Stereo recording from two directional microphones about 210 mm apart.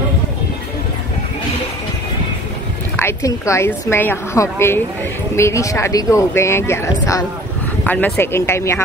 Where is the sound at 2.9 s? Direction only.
10° left (ahead or behind).